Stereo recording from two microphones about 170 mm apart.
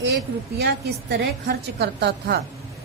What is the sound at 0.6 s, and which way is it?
A woman's voice, 75° right (ahead or behind).